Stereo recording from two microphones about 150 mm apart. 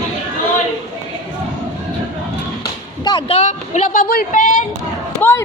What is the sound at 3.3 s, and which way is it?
Speech, 50° left (ahead or behind).